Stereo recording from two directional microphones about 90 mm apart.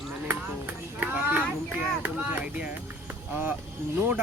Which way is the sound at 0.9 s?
20° right (ahead or behind).